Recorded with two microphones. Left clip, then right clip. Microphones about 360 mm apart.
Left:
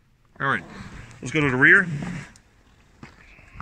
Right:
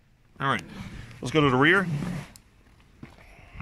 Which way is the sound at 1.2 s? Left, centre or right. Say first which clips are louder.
Left 3 dB; right.